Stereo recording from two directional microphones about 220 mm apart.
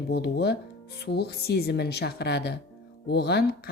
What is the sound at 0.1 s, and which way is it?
Speech, 50° left (ahead or behind).